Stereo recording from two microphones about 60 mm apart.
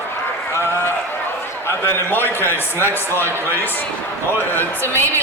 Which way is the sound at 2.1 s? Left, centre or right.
Left.